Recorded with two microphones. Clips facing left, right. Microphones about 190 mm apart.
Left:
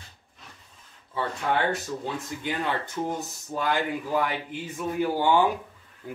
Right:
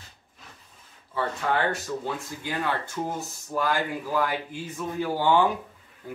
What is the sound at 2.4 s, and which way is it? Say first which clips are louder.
Speech: even; 20° left (ahead or behind).